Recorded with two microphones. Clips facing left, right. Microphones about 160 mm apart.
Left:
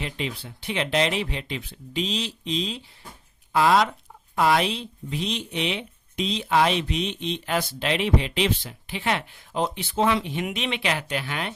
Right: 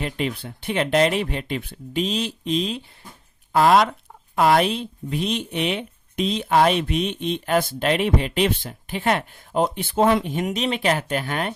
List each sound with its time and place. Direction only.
0.0 s speech: 55° right (ahead or behind)